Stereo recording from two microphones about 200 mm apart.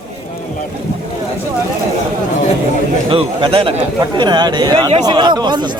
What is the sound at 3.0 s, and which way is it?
Speech, 25° right (ahead or behind).